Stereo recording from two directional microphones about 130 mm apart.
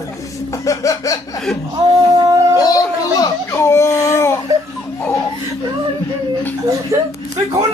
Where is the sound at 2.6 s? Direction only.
30° left (ahead or behind).